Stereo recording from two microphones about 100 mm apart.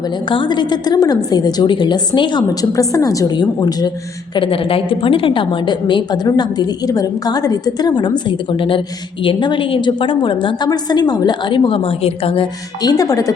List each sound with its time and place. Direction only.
0.3 s a woman's voice: 50° left (ahead or behind)
2.7 s a woman's voice: 35° left (ahead or behind)
4.4 s a woman's voice: 65° left (ahead or behind)
10.7 s a woman's voice: 45° left (ahead or behind); by 12.5 s 70° left (ahead or behind)
12.8 s a woman's voice: 40° left (ahead or behind)